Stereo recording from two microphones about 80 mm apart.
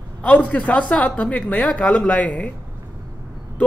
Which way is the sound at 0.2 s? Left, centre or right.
Centre.